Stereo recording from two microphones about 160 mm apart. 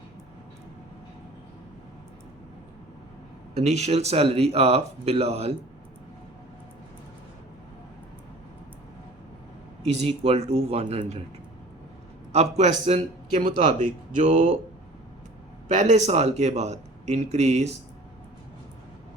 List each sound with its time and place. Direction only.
3.5 s speech: 45° right (ahead or behind)
10.0 s speech: 40° right (ahead or behind)
12.3 s speech: 45° right (ahead or behind)
15.7 s speech: 45° right (ahead or behind)